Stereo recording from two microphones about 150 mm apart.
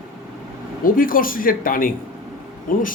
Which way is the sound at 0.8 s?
70° left (ahead or behind).